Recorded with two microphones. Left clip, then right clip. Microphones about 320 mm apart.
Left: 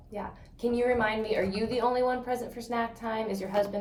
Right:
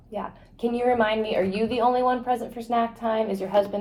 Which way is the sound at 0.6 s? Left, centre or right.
Centre.